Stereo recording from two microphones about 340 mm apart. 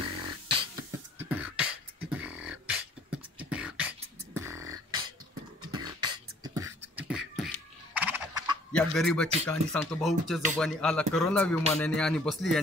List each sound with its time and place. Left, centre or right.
0.0 s beatboxing: centre
8.9 s speech: centre